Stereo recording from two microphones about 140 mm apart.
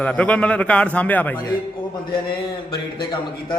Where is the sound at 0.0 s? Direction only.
10° left (ahead or behind).